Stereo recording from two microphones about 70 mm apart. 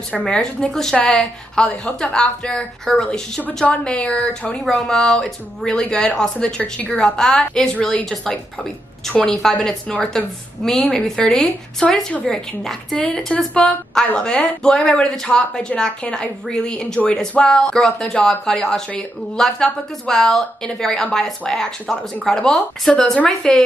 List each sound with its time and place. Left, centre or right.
0.2 s speech: centre
9.3 s speech: centre